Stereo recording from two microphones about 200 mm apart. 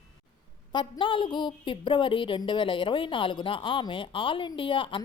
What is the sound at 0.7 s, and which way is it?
A woman's voice, 25° left (ahead or behind).